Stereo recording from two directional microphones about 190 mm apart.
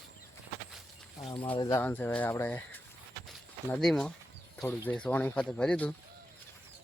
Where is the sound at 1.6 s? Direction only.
20° left (ahead or behind).